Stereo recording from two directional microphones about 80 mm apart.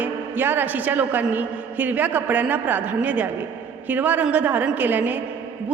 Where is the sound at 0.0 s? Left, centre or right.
Right.